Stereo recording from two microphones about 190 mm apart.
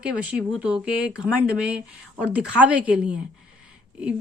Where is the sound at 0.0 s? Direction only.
5° right (ahead or behind).